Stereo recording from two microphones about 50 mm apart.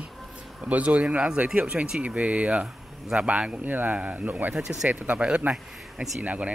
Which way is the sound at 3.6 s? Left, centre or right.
Right.